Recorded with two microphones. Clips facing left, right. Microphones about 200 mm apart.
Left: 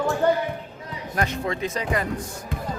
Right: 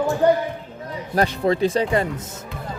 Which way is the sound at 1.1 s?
35° right (ahead or behind).